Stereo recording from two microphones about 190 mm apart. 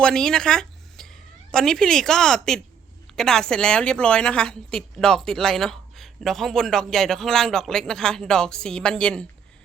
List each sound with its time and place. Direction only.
0.0 s a woman's voice: 5° left (ahead or behind)